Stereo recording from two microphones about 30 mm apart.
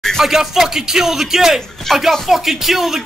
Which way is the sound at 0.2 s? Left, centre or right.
Centre.